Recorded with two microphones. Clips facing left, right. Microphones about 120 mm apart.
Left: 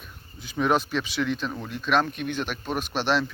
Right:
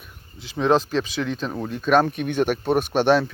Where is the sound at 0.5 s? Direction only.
30° right (ahead or behind).